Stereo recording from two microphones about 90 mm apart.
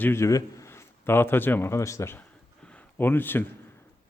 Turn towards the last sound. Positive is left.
turn(degrees=20)  # may be behind; listen again after turning